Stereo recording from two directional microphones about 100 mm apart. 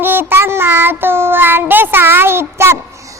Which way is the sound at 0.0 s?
20° right (ahead or behind).